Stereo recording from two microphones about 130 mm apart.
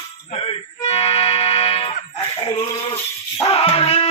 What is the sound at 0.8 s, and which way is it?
Music, 50° left (ahead or behind).